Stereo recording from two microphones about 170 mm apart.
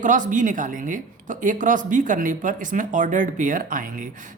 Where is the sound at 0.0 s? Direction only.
50° right (ahead or behind).